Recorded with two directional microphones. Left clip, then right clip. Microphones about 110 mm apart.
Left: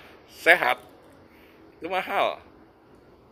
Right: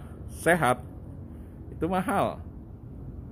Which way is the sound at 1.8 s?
40° right (ahead or behind).